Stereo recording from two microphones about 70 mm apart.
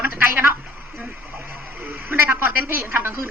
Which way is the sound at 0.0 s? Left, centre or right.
Right.